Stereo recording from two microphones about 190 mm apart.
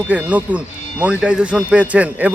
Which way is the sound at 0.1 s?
5° right (ahead or behind).